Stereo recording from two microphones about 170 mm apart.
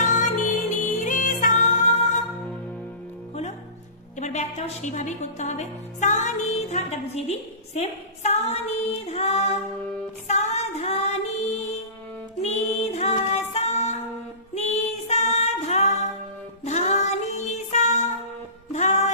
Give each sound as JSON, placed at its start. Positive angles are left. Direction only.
{"t": 0.0, "sound": "music", "side_deg": 50}
{"t": 4.2, "sound": "a woman's voice", "side_deg": 40}
{"t": 10.2, "sound": "female singing", "side_deg": 40}
{"t": 12.4, "sound": "music", "side_deg": 40}